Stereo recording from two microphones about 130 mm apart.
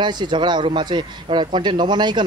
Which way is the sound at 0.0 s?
35° right (ahead or behind).